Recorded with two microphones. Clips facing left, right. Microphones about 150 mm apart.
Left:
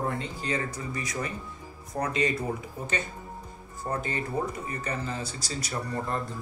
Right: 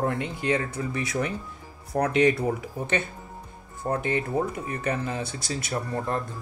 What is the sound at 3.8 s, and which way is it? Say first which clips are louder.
Speech: right 4 dB; 5° right (ahead or behind).